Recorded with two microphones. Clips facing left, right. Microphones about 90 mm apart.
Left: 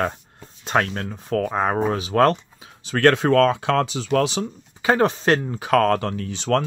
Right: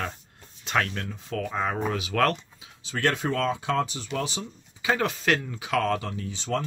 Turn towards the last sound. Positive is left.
turn(degrees=70)  # may be behind; listen again after turning